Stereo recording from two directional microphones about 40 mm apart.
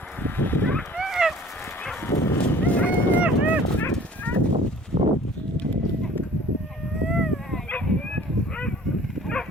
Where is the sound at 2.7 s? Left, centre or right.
Left.